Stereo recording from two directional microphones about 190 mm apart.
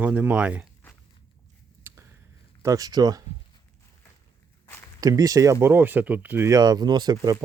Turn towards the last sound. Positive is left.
turn(degrees=-20)  # may be behind; listen again after turning